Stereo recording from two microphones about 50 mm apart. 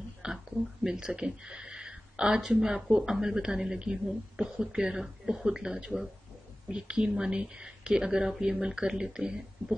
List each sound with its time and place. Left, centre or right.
0.2 s speech: centre